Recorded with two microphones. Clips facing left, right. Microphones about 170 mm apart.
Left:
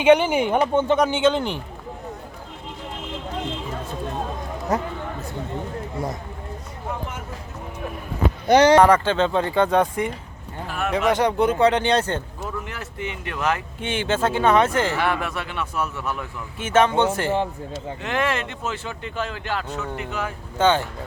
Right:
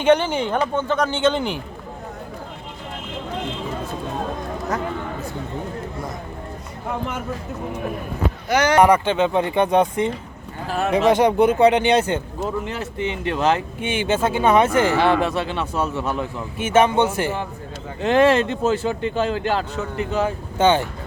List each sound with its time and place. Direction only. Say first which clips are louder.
0.0 s speech: left 1 dB; 10° left (ahead or behind)
1.3 s speech: even; centre (ahead or behind)
4.7 s speech: left 2 dB; 30° left (ahead or behind)
8.4 s speech: left 5 dB; 30° left (ahead or behind)
8.8 s speech: right 1 dB; 15° right (ahead or behind)
10.7 s a sound: right 4 dB; 35° right (ahead or behind)
11.2 s speech: right 3 dB; 15° right (ahead or behind)
12.4 s speech: right 6 dB; 25° right (ahead or behind)
13.8 s speech: right 1 dB; 15° right (ahead or behind)
14.9 s speech: right 6 dB; 30° right (ahead or behind)
16.6 s speech: right 2 dB; 5° right (ahead or behind)
18.0 s speech: right 10 dB; 30° right (ahead or behind)
20.6 s speech: right 2 dB; 15° right (ahead or behind)